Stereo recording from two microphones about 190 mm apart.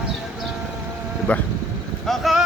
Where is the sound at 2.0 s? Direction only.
Centre (ahead or behind).